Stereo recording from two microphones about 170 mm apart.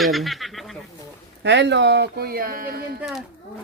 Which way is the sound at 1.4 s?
90° right.